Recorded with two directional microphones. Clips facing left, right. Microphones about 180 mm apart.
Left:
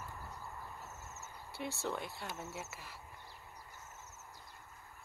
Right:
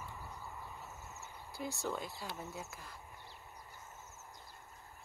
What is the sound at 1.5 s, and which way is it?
Speech, centre (ahead or behind).